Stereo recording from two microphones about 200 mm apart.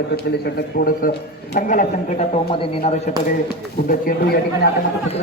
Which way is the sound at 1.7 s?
40° left (ahead or behind).